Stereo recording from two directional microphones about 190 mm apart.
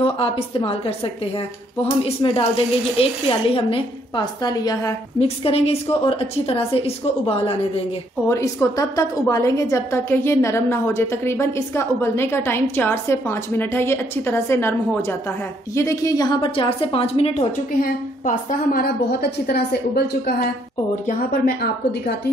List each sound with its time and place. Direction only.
0.0 s a woman's voice: 30° left (ahead or behind)
5.4 s a woman's voice: 30° left (ahead or behind)
8.3 s a woman's voice: 15° left (ahead or behind); by 17.5 s 30° left (ahead or behind)
17.7 s a woman's voice: 50° left (ahead or behind)
21.1 s a woman's voice: 50° left (ahead or behind)